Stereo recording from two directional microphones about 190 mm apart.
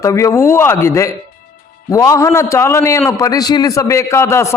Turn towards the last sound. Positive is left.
turn(degrees=15)  # may be behind; listen again after turning